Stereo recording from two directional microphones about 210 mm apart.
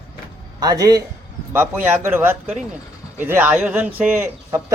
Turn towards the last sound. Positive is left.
turn(degrees=-10)  # may be behind; listen again after turning